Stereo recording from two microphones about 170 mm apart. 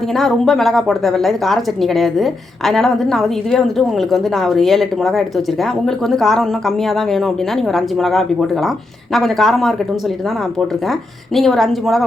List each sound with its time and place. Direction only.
0.2 s a woman's voice: centre (ahead or behind)
11.3 s a woman's voice: centre (ahead or behind)